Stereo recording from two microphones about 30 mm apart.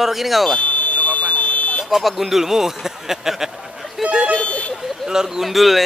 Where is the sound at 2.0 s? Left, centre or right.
Centre.